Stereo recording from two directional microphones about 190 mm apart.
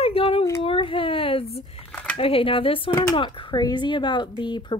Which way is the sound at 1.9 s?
5° left (ahead or behind).